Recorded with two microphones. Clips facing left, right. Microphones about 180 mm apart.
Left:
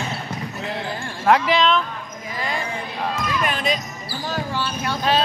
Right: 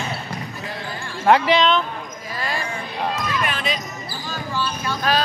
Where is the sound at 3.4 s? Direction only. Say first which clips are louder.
Left 2 dB; 45° left (ahead or behind).